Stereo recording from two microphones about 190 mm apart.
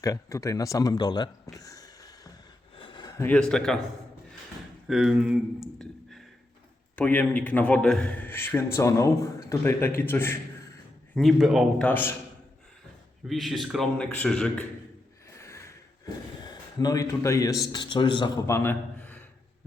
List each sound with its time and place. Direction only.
0.0 s a man's voice: 15° left (ahead or behind)
1.5 s a sound: 20° left (ahead or behind)
4.9 s a man's voice: 5° right (ahead or behind)
11.1 s a man's voice: centre (ahead or behind)
13.2 s a man's voice: centre (ahead or behind)
15.4 s a sound: 15° left (ahead or behind)
16.7 s a man's voice: 20° left (ahead or behind)